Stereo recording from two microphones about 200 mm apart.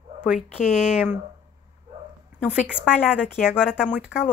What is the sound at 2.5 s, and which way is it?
Speech, 5° right (ahead or behind).